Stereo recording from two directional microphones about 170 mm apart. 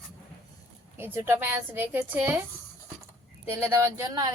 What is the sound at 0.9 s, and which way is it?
A woman's voice, 15° right (ahead or behind).